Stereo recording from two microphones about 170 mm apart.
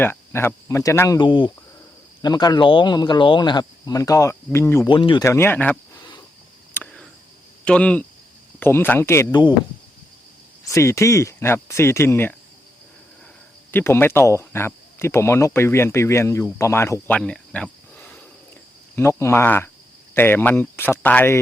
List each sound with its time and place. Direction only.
0.0 s speech: 15° left (ahead or behind)
4.9 s speech: 30° left (ahead or behind)
5.2 s speech: 15° left (ahead or behind)
6.7 s a sound: 5° left (ahead or behind)
7.6 s speech: 5° left (ahead or behind)
10.7 s speech: 15° left (ahead or behind)
13.7 s speech: 15° left (ahead or behind)